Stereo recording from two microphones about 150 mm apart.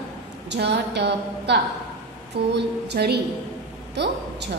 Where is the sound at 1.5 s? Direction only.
90° right.